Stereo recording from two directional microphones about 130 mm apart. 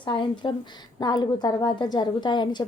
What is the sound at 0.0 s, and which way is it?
A woman's voice, 40° left (ahead or behind).